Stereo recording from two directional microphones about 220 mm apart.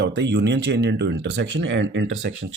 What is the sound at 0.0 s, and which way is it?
Speech, 50° right (ahead or behind).